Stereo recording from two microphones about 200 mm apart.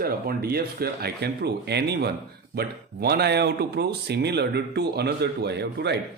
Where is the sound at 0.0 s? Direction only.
50° right (ahead or behind).